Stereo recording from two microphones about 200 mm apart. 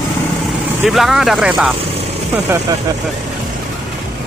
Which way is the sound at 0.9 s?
Centre (ahead or behind).